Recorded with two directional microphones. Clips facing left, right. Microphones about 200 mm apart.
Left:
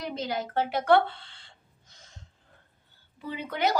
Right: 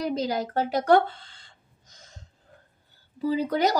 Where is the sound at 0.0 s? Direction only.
40° right (ahead or behind).